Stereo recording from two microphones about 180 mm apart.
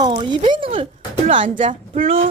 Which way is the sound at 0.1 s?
25° right (ahead or behind).